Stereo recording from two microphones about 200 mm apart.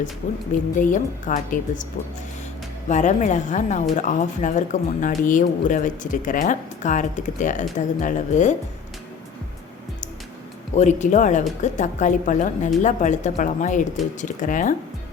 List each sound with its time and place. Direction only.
0.8 s speech: 40° left (ahead or behind)
2.9 s speech: 35° left (ahead or behind)
10.8 s speech: 35° left (ahead or behind)